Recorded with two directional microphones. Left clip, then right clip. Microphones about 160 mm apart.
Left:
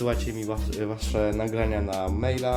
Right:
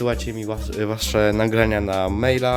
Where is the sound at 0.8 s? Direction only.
45° right (ahead or behind).